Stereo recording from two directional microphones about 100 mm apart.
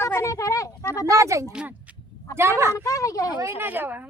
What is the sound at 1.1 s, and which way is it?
Speech, 30° right (ahead or behind).